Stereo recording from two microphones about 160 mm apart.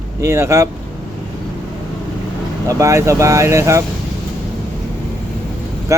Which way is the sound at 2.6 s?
20° right (ahead or behind).